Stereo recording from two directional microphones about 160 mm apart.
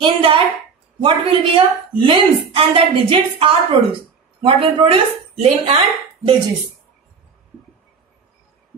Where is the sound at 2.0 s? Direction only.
35° right (ahead or behind).